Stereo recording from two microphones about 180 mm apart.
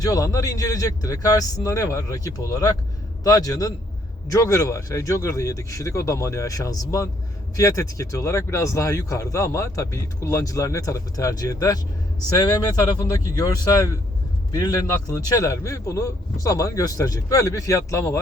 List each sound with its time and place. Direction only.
0.0 s speech: 20° left (ahead or behind)